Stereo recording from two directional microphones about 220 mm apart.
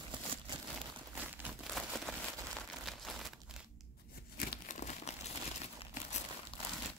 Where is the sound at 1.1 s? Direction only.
10° right (ahead or behind).